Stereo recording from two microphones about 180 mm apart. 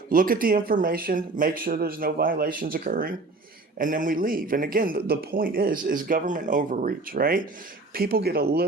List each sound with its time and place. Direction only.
0.1 s speech: 50° right (ahead or behind)